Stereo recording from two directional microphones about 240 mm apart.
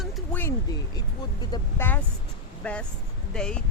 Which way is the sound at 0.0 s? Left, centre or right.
Centre.